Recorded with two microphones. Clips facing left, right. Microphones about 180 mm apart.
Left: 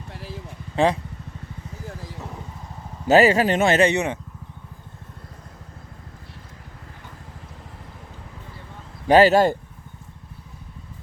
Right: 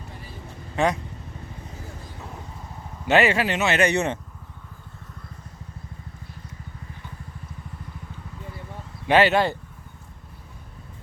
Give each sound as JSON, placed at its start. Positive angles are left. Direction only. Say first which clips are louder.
{"t": 0.1, "sound": "vehicle", "louder": "left 5 dB", "side_deg": 90}
{"t": 0.8, "sound": "speech", "louder": "left 3 dB", "side_deg": 30}
{"t": 3.1, "sound": "speech", "louder": "left 4 dB", "side_deg": 40}
{"t": 3.9, "sound": "speech", "louder": "even", "side_deg": 15}
{"t": 9.0, "sound": "speech", "louder": "left 4 dB", "side_deg": 40}